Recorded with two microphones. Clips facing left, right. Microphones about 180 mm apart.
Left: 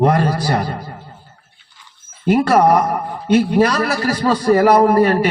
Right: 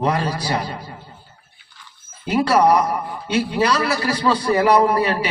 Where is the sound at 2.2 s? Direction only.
50° left (ahead or behind).